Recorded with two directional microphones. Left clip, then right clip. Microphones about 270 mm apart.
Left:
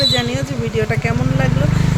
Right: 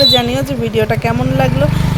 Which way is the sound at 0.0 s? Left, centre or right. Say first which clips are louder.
Right 6 dB; centre.